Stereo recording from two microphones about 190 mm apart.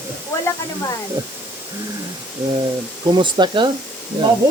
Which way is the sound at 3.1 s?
25° right (ahead or behind).